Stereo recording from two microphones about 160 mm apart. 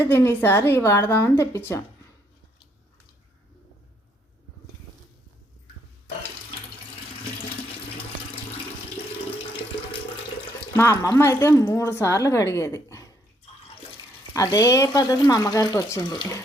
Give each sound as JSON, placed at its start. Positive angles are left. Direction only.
{"t": 0.0, "sound": "a woman's voice", "side_deg": 15}
{"t": 10.8, "sound": "a woman's voice", "side_deg": 20}
{"t": 14.3, "sound": "speech", "side_deg": 20}